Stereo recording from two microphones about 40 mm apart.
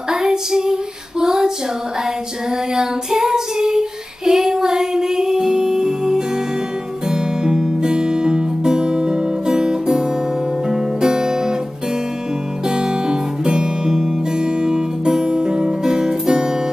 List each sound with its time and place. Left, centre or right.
0.1 s female singing: centre
2.7 s child singing: centre
7.1 s music: centre
12.6 s music: centre